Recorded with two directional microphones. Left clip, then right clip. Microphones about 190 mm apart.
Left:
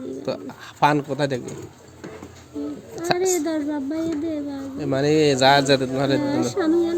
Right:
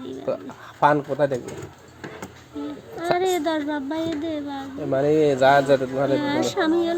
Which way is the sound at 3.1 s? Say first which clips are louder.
Even; 25° left (ahead or behind).